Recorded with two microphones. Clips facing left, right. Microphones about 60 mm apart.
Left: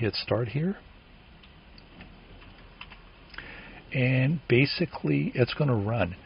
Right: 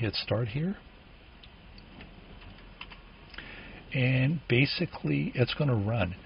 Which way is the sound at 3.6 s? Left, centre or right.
Left.